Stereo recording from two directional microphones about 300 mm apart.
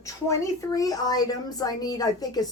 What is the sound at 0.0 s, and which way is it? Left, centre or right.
A woman's voice, centre.